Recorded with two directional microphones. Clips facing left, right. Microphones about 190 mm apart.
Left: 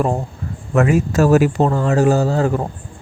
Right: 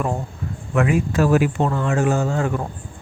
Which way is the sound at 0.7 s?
40° left (ahead or behind).